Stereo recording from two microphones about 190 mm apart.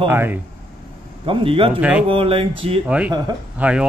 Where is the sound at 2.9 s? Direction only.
5° right (ahead or behind).